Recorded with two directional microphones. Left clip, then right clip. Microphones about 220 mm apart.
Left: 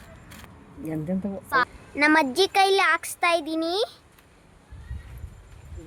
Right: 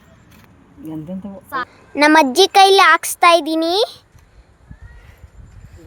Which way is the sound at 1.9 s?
35° right (ahead or behind).